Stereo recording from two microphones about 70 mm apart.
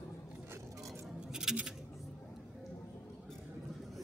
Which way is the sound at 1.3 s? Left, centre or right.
Centre.